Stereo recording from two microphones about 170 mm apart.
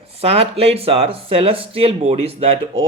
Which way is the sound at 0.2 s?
35° right (ahead or behind).